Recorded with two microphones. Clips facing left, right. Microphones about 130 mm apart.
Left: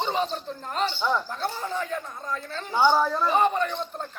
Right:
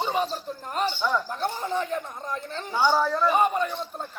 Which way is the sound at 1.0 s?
15° left (ahead or behind).